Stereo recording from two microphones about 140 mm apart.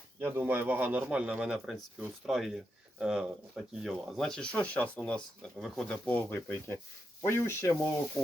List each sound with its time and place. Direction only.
0.2 s a man's voice: 15° right (ahead or behind); by 7.8 s 20° left (ahead or behind)